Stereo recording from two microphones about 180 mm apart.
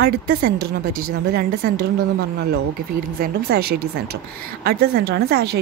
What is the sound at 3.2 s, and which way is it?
A woman's voice, 60° right (ahead or behind).